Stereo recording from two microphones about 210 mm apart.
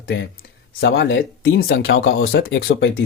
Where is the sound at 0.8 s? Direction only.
45° left (ahead or behind).